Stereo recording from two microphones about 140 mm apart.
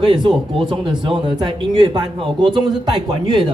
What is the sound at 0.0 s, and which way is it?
A man's voice, 35° right (ahead or behind).